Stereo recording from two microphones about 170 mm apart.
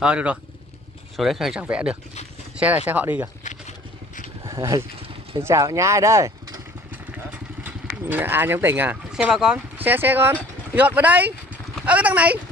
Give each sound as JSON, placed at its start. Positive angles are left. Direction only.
{"t": 0.0, "sound": "speech", "side_deg": -5}
{"t": 4.5, "sound": "speech", "side_deg": -20}
{"t": 7.1, "sound": "vehicle", "side_deg": -10}
{"t": 9.8, "sound": "speech", "side_deg": -10}